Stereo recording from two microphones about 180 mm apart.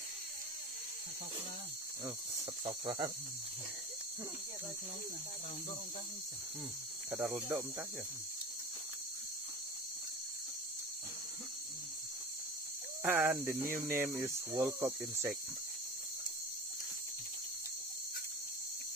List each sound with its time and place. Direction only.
2.6 s speech: 25° right (ahead or behind)
7.1 s speech: 10° right (ahead or behind)
13.0 s speech: 10° right (ahead or behind)